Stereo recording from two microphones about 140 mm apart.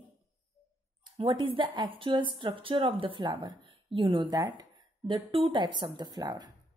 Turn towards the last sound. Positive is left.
turn(degrees=-25)  # may be behind; listen again after turning